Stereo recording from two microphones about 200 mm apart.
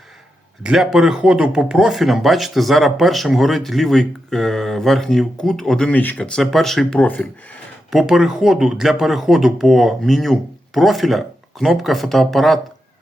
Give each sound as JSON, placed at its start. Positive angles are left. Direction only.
{"t": 0.6, "sound": "speech", "side_deg": -5}